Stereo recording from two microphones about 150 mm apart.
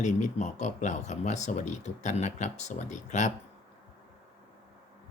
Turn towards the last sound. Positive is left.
turn(degrees=55)  # may be behind; listen again after turning